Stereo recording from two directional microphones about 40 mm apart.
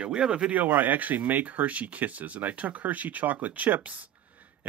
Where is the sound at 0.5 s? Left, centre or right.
Right.